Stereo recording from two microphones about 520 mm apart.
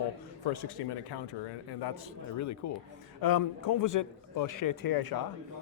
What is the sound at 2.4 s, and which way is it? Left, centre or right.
A man's voice, left.